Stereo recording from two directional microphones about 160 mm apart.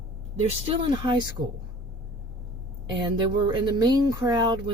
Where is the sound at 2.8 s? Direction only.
30° right (ahead or behind).